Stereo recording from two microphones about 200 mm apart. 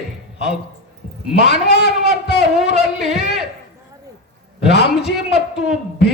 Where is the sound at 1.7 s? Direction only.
55° left (ahead or behind).